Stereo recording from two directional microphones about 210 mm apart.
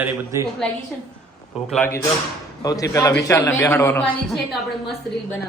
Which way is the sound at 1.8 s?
10° left (ahead or behind).